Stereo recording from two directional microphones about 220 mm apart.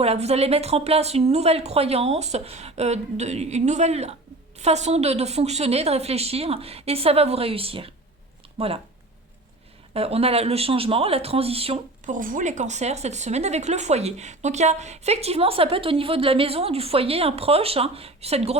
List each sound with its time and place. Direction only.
0.0 s speech: 30° right (ahead or behind)
9.9 s speech: 25° right (ahead or behind)